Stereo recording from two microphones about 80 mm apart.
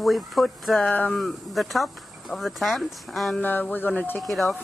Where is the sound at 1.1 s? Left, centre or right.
Centre.